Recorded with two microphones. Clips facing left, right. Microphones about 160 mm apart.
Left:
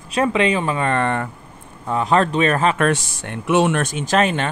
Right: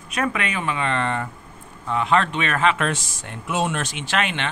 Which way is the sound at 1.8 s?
40° left (ahead or behind).